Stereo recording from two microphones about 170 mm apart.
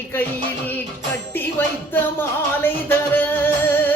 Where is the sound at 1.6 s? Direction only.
10° left (ahead or behind).